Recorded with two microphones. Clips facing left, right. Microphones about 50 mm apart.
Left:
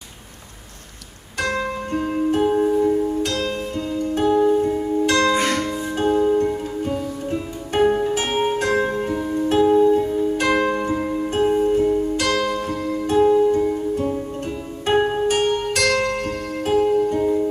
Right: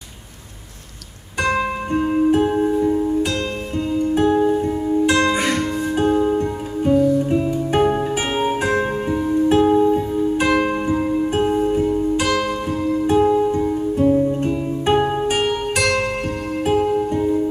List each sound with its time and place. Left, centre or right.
1.4 s music: centre
9.7 s music: centre